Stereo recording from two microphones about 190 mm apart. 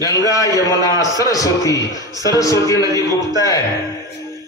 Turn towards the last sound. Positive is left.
turn(degrees=15)  # may be behind; listen again after turning